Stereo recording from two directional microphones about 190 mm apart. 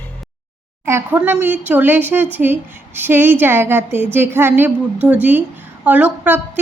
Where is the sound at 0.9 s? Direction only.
10° right (ahead or behind).